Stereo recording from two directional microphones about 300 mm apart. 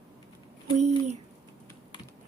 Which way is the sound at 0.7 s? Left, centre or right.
Right.